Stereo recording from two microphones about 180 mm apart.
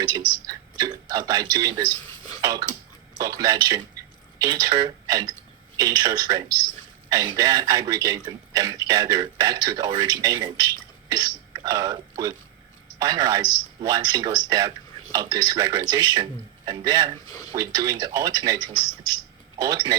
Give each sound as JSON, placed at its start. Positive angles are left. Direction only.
{"t": 0.0, "sound": "a man's voice", "side_deg": -20}
{"t": 2.0, "sound": "a sound", "side_deg": 20}
{"t": 2.4, "sound": "a sound", "side_deg": -20}
{"t": 3.2, "sound": "speech", "side_deg": -20}
{"t": 11.1, "sound": "burping", "side_deg": -20}
{"t": 13.0, "sound": "speech", "side_deg": -20}
{"t": 17.2, "sound": "speech", "side_deg": 20}
{"t": 17.5, "sound": "speech", "side_deg": -20}